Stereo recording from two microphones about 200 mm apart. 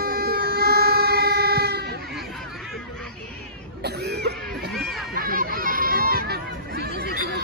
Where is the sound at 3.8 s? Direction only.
55° right (ahead or behind).